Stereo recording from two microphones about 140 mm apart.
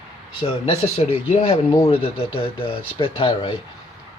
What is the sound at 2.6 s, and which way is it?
Speech, 40° left (ahead or behind).